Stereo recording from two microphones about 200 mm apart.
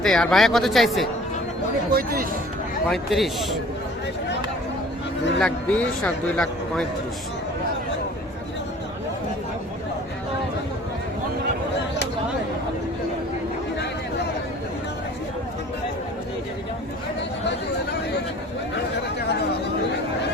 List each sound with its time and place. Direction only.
0.0 s speech: 5° left (ahead or behind)
1.9 s speech: 50° right (ahead or behind)
2.9 s speech: centre (ahead or behind)
5.4 s speech: 5° left (ahead or behind)